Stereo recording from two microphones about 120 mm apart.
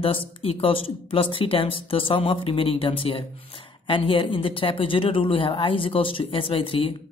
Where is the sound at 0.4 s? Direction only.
50° left (ahead or behind).